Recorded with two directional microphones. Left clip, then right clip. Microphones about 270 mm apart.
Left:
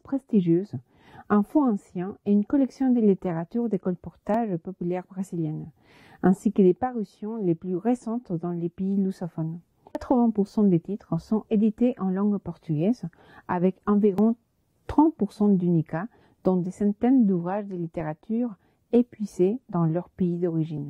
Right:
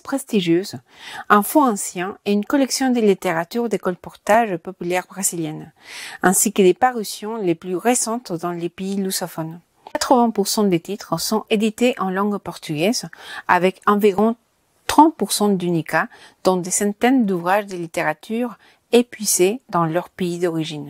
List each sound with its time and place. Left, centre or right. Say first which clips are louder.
0.0 s a woman's voice: right 5 dB; centre
15.4 s a woman's voice: right 4 dB; centre